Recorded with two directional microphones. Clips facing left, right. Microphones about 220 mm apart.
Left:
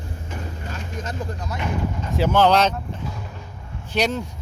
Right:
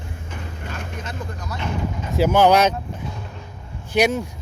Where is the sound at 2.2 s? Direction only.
10° right (ahead or behind).